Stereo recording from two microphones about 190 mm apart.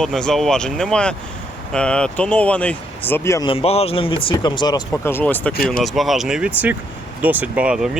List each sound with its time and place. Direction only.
0.0 s speech: 5° left (ahead or behind)
3.4 s speech: 30° left (ahead or behind); by 7.9 s 5° right (ahead or behind)